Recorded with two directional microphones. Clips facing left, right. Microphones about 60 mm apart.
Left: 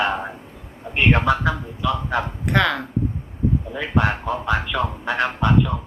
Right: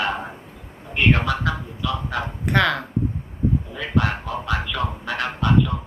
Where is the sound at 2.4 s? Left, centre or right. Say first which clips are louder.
Right 1 dB; centre.